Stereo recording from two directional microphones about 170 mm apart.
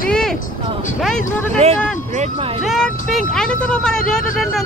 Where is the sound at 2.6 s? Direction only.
Centre (ahead or behind).